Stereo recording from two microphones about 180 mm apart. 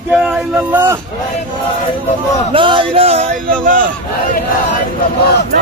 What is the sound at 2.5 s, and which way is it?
Speech, 30° right (ahead or behind).